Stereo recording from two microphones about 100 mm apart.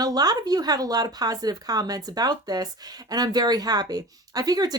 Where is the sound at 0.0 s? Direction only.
40° right (ahead or behind).